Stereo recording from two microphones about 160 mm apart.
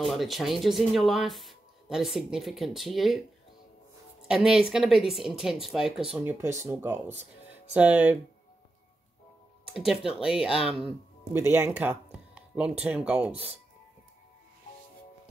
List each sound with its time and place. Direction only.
0.0 s speech: centre (ahead or behind)
4.3 s speech: 5° right (ahead or behind)
9.8 s speech: centre (ahead or behind)
11.3 s speech: 15° right (ahead or behind)
13.3 s speech: 40° right (ahead or behind)